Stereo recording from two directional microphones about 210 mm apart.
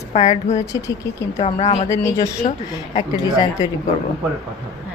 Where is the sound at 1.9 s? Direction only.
15° left (ahead or behind).